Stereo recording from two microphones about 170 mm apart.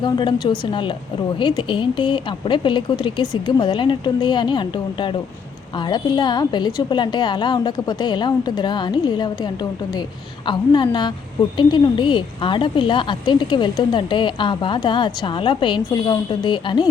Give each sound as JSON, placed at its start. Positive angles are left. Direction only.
{"t": 0.0, "sound": "a woman's voice", "side_deg": 25}